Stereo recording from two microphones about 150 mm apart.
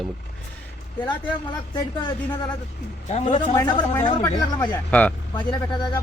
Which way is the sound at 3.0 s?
50° left (ahead or behind).